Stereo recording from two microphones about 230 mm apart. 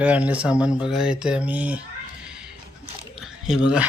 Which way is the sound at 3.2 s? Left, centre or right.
Centre.